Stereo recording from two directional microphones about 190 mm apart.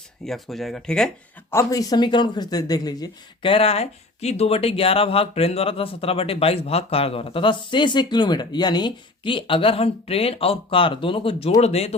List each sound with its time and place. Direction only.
0.3 s speech: centre (ahead or behind)
1.5 s speech: 20° left (ahead or behind)